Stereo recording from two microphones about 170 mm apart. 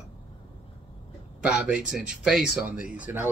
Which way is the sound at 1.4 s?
5° right (ahead or behind).